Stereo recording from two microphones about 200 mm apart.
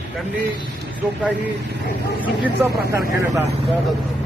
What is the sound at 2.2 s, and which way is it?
Speech, 10° right (ahead or behind).